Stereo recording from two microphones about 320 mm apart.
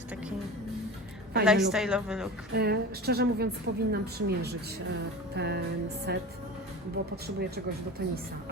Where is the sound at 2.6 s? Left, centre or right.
Right.